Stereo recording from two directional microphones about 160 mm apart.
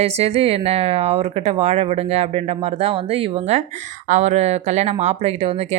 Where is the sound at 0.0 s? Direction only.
40° right (ahead or behind).